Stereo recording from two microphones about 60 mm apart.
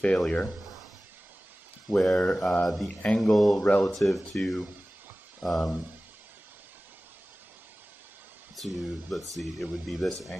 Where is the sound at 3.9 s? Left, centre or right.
Centre.